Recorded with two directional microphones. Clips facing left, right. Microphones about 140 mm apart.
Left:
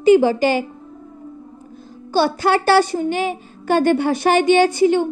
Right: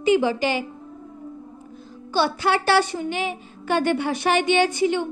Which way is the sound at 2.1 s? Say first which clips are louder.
Left 5 dB; 40° left (ahead or behind).